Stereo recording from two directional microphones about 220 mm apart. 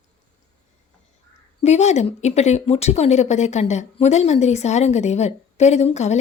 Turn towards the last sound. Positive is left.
turn(degrees=30)  # may be behind; listen again after turning